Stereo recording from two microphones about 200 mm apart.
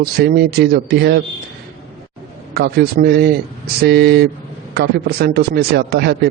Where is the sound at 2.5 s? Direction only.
50° right (ahead or behind).